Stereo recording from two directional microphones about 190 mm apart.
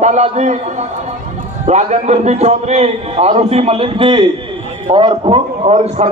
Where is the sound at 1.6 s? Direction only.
35° right (ahead or behind).